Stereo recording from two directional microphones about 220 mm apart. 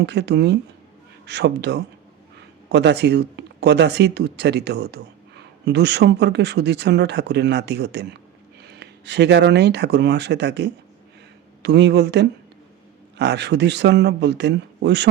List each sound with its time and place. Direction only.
0.0 s speech: 50° right (ahead or behind)